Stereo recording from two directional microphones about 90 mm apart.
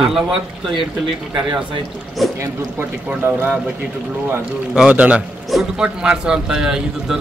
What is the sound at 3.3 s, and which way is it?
Speech, 20° right (ahead or behind).